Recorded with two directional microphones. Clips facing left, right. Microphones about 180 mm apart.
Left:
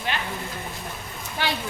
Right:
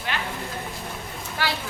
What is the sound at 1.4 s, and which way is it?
Vehicle, 20° left (ahead or behind).